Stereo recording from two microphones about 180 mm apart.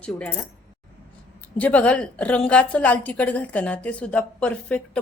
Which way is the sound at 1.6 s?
5° left (ahead or behind).